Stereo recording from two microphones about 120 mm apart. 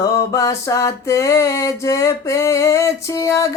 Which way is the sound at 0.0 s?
25° left (ahead or behind).